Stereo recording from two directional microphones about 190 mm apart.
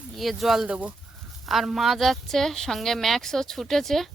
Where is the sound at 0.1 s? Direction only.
Centre (ahead or behind).